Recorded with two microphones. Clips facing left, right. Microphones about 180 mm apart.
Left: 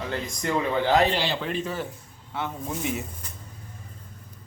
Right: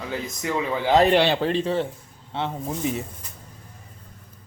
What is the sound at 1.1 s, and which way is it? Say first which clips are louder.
Speech: right 8 dB; 65° right (ahead or behind).